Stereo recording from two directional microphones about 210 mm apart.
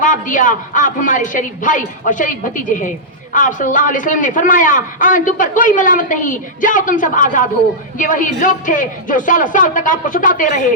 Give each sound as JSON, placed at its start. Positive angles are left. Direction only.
{"t": 0.0, "sound": "a man's voice", "side_deg": 40}